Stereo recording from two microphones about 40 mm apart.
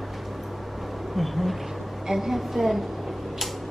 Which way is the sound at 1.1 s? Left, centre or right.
Centre.